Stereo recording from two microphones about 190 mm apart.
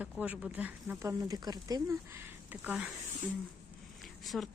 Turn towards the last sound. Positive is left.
turn(degrees=5)  # may be behind; listen again after turning